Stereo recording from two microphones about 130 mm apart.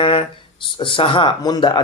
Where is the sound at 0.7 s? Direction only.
40° left (ahead or behind).